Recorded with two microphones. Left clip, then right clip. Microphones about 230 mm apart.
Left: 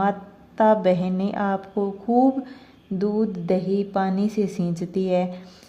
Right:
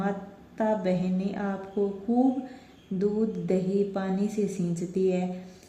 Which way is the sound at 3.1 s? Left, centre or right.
Left.